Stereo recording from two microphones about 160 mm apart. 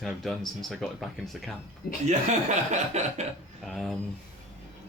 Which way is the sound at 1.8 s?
70° left (ahead or behind).